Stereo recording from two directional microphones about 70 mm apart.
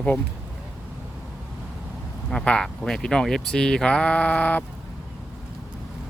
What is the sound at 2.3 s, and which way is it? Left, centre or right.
Speech, centre.